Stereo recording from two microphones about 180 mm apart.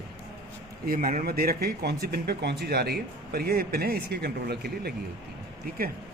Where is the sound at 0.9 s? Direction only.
50° right (ahead or behind).